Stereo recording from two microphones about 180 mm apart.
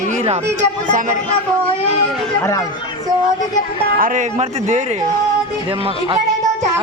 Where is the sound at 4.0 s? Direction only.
45° right (ahead or behind).